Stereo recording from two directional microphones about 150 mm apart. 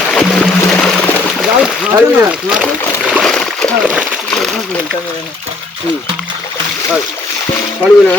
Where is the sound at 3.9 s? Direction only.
5° right (ahead or behind).